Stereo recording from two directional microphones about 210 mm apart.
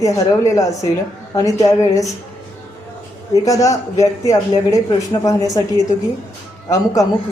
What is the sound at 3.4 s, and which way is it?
Speech, 15° left (ahead or behind).